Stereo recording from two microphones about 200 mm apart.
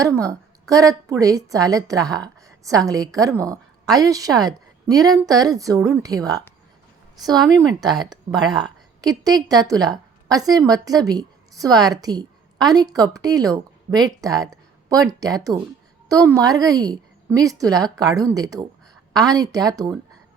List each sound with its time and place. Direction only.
0.0 s a woman's voice: 15° right (ahead or behind)